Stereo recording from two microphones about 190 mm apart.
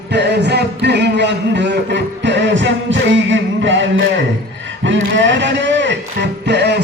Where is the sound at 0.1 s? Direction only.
65° right (ahead or behind).